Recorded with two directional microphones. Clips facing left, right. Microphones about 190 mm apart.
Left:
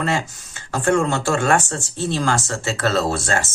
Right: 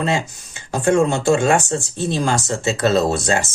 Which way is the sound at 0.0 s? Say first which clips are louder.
Right 2 dB; 20° right (ahead or behind).